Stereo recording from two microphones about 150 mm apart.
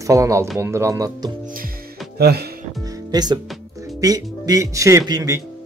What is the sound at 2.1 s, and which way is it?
Speech, 90° right.